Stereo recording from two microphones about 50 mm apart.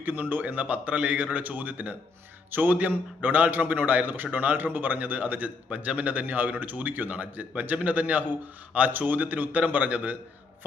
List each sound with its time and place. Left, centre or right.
0.0 s a man's voice: right